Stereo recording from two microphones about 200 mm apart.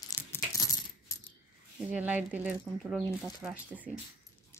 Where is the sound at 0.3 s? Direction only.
15° left (ahead or behind).